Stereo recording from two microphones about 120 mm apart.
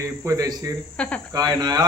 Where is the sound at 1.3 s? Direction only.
35° right (ahead or behind).